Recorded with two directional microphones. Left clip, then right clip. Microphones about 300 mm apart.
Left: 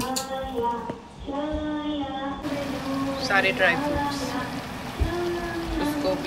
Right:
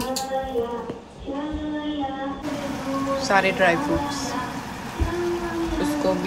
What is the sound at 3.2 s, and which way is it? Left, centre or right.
Speech, right.